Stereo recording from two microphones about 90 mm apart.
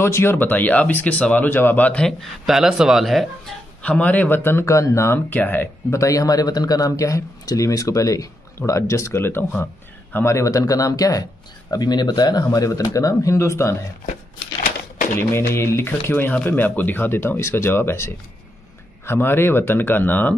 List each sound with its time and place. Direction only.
0.0 s speech: 30° left (ahead or behind)
2.0 s a man's voice: 5° left (ahead or behind)
2.4 s speech: 5° right (ahead or behind)
3.8 s speech: 15° left (ahead or behind); by 5.2 s 35° left (ahead or behind)
5.3 s speech: 20° left (ahead or behind)
5.9 s a man's voice: 40° left (ahead or behind)
10.2 s a man's voice: 35° left (ahead or behind)
15.1 s speech: 30° left (ahead or behind)